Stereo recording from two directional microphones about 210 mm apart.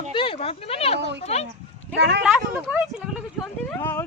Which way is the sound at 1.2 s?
30° left (ahead or behind).